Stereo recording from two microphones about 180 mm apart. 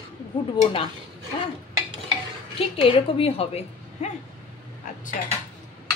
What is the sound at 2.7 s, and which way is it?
A woman's voice, 30° left (ahead or behind).